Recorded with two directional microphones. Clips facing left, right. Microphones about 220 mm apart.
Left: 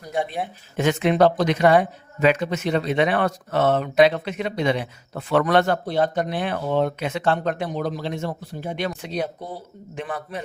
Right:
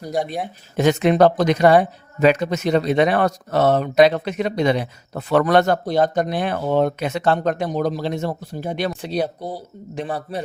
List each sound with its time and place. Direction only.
0.0 s speech: 40° right (ahead or behind)